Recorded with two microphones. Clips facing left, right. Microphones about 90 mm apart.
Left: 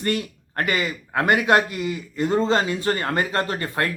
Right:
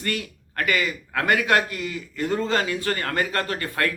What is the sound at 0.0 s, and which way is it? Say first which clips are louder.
A man's voice: left 4 dB; 30° left (ahead or behind).